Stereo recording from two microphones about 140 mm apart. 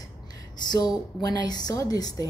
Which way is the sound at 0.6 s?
30° left (ahead or behind).